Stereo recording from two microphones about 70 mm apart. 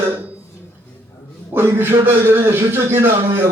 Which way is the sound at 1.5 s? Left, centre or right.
Right.